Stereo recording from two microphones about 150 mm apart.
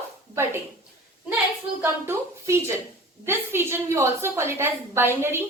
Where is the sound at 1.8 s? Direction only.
15° right (ahead or behind).